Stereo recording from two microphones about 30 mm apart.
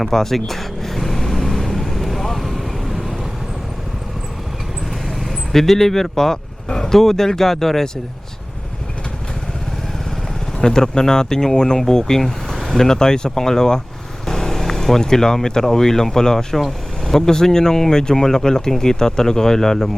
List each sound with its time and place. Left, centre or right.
0.0 s vehicle: centre
5.0 s vehicle: centre
5.5 s speech: centre
10.6 s speech: left
14.3 s vehicle: centre
15.6 s speech: centre